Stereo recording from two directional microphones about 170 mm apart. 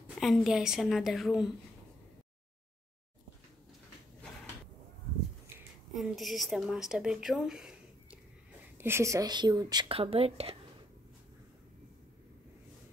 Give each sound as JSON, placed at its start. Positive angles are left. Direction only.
{"t": 0.2, "sound": "a woman's voice", "side_deg": 0}
{"t": 5.9, "sound": "a woman's voice", "side_deg": 0}
{"t": 8.7, "sound": "speech", "side_deg": -15}